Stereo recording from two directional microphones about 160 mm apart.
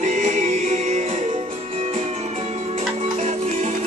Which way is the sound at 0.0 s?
50° right (ahead or behind).